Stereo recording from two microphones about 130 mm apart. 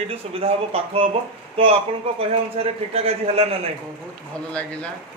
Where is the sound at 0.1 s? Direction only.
50° right (ahead or behind).